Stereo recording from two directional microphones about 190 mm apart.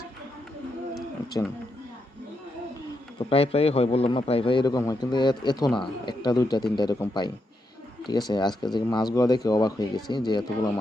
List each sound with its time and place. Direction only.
3.2 s speech: 30° left (ahead or behind)